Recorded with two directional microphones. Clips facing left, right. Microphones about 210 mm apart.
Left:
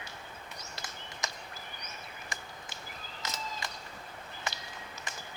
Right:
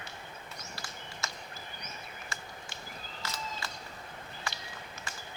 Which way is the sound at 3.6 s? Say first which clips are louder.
Left 1 dB; 15° left (ahead or behind).